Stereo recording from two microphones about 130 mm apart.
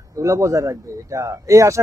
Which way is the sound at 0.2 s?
25° right (ahead or behind).